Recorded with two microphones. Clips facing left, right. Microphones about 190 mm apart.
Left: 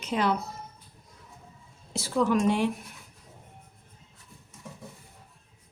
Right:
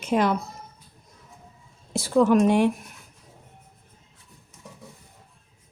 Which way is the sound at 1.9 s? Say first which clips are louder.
Right 6 dB; 50° right (ahead or behind).